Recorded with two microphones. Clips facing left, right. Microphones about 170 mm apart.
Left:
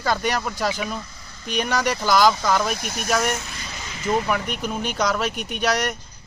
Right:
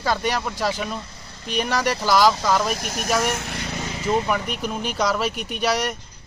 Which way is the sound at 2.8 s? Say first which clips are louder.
Right 1 dB; 45° right (ahead or behind).